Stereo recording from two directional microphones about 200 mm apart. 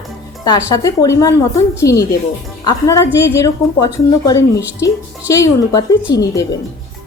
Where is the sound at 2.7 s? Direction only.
15° left (ahead or behind).